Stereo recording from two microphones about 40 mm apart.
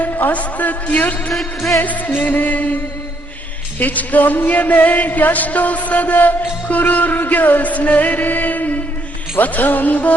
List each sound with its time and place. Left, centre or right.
0.0 s speech: left
1.3 s music: centre
1.8 s speech: left
3.8 s speech: left
7.7 s music: left
9.4 s speech: left